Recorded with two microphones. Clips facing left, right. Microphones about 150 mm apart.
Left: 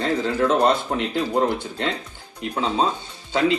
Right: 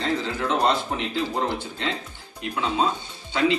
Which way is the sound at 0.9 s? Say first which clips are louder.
Left 5 dB; 50° left (ahead or behind).